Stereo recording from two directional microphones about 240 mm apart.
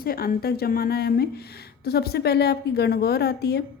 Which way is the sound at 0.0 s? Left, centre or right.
Left.